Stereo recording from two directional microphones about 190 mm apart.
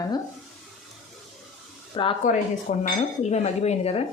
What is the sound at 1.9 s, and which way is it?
Speech, 25° left (ahead or behind).